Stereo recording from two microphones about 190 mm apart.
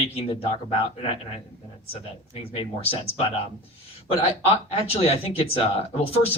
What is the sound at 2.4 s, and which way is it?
Speech, 30° left (ahead or behind).